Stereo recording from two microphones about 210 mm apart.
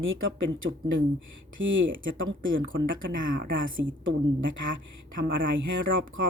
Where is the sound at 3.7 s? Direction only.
65° right (ahead or behind).